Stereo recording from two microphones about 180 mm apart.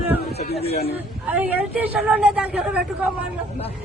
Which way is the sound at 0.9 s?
10° right (ahead or behind).